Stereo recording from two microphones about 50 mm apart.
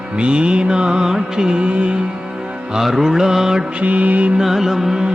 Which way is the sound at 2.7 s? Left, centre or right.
Centre.